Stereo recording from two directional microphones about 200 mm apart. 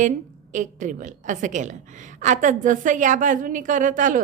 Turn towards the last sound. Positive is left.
turn(degrees=-40)  # may be behind; listen again after turning